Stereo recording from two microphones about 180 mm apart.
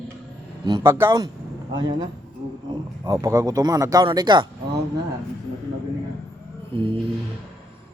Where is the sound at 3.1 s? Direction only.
15° right (ahead or behind).